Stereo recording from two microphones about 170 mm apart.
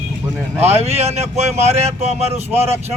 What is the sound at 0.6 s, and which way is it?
Speech, 40° right (ahead or behind).